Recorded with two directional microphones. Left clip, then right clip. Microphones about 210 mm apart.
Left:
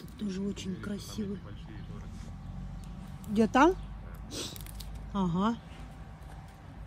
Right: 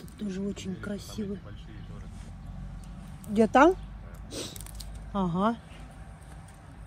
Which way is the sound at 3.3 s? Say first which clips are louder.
Right 4 dB; 15° left (ahead or behind).